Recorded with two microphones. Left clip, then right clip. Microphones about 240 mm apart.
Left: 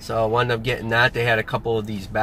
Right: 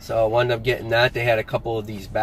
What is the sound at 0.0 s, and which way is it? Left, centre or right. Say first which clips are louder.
Speech: right 1 dB; centre.